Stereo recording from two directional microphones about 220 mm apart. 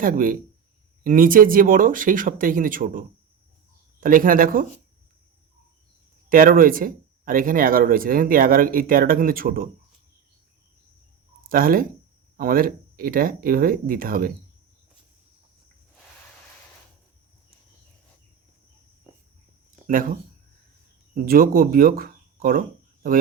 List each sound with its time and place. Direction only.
0.0 s speech: 40° right (ahead or behind)
4.0 s speech: 40° right (ahead or behind)
6.2 s speech: 40° right (ahead or behind)
11.4 s speech: 40° right (ahead or behind)
19.9 s speech: 40° right (ahead or behind)
21.2 s speech: 45° right (ahead or behind)